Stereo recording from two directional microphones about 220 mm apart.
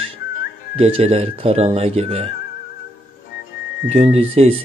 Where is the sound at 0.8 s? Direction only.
25° right (ahead or behind).